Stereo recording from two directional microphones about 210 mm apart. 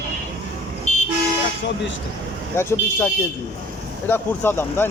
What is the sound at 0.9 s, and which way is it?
Vehicle, 35° left (ahead or behind).